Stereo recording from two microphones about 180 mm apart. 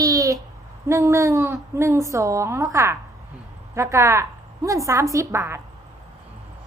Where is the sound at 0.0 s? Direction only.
20° right (ahead or behind).